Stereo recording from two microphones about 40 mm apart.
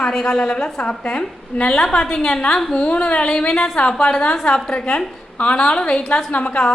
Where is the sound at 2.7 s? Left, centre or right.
Left.